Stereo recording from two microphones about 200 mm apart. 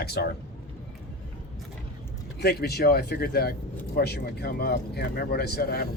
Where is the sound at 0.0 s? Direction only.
55° left (ahead or behind).